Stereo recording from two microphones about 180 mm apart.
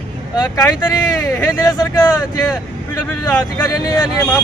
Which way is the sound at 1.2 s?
15° left (ahead or behind).